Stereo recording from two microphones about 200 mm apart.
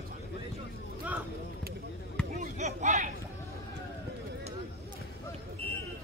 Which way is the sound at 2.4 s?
35° right (ahead or behind).